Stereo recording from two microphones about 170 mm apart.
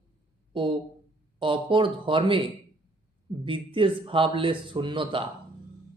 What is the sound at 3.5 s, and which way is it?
Speech, 30° right (ahead or behind).